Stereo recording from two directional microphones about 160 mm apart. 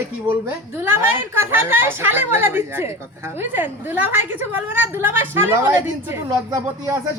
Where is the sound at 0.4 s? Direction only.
15° right (ahead or behind).